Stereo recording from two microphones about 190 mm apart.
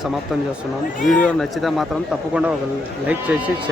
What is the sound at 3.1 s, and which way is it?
Speech, 5° right (ahead or behind).